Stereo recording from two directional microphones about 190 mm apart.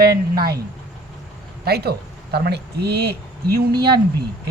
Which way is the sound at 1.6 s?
55° right (ahead or behind).